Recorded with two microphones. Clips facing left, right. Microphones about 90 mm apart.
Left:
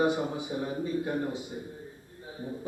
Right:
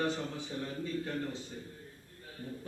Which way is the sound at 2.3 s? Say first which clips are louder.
Left 6 dB; 20° left (ahead or behind).